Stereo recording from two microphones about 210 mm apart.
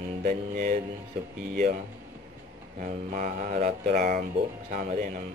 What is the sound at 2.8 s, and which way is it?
Speech, 40° right (ahead or behind).